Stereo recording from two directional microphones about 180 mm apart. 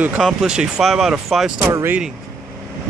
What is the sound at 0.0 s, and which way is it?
Speech, 5° right (ahead or behind).